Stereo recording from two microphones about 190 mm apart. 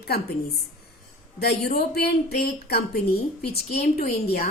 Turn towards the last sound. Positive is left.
turn(degrees=50)  # may be behind; listen again after turning